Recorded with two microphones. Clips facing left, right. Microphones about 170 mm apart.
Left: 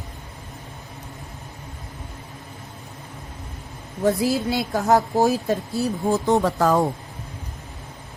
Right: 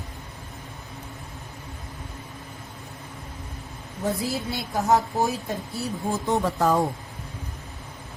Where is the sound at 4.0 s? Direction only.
80° left.